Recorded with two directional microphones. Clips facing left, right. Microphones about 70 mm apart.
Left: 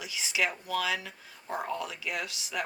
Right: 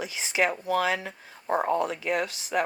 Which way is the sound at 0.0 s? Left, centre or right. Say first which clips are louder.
Right 5 dB; right.